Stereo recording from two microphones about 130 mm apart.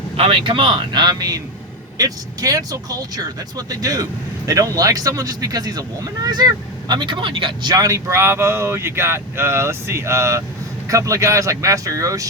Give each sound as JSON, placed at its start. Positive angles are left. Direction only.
{"t": 0.2, "sound": "speech", "side_deg": -45}